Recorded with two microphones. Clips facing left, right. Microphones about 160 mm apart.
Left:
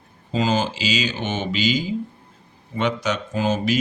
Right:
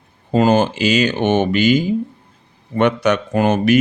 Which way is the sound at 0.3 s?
55° right (ahead or behind).